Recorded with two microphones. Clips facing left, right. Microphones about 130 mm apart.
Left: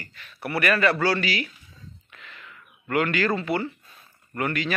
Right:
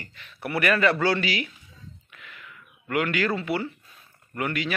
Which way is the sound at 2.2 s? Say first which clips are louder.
Left 1 dB; 10° right (ahead or behind).